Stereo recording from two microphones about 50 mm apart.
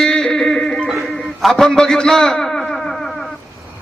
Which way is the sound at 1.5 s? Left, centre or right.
Centre.